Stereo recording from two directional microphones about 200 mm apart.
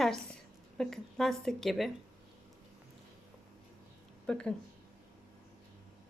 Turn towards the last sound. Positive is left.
turn(degrees=5)  # may be behind; listen again after turning